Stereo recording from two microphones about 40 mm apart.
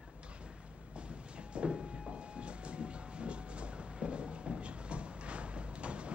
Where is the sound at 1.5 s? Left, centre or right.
Right.